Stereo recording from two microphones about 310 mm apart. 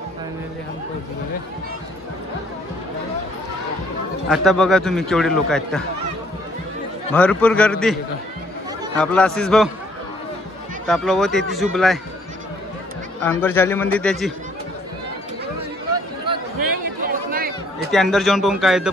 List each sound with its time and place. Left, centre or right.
4.3 s a man's voice: centre
7.2 s a man's voice: centre
10.9 s a man's voice: centre
13.2 s a man's voice: centre
17.0 s chatter: right
17.9 s a man's voice: centre